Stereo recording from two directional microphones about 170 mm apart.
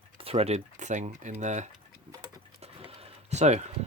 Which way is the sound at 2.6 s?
40° right (ahead or behind).